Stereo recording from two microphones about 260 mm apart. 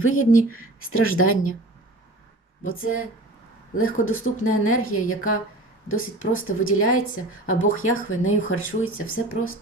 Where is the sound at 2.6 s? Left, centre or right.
Left.